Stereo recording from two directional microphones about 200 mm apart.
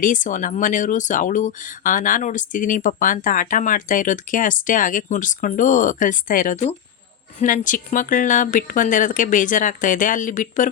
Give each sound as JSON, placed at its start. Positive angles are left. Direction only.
{"t": 0.0, "sound": "speech", "side_deg": 40}